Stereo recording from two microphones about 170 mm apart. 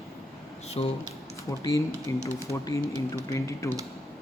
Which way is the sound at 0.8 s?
30° left (ahead or behind).